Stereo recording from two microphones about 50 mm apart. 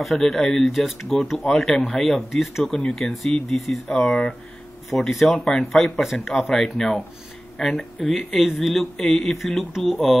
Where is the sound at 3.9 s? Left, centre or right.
Centre.